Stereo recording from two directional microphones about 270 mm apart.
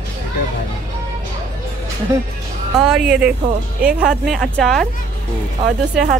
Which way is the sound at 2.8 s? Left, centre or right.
Centre.